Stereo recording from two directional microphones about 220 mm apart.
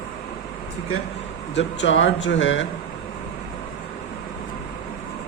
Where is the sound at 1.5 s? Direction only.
55° left (ahead or behind).